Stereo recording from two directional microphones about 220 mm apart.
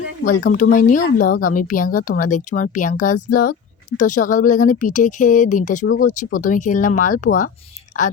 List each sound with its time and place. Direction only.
0.5 s speech: 35° left (ahead or behind)